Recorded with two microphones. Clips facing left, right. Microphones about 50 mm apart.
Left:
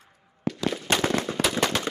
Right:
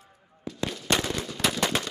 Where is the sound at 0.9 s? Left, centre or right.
Left.